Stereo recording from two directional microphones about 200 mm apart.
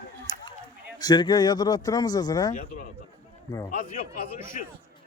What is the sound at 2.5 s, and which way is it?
A man's voice, 40° left (ahead or behind).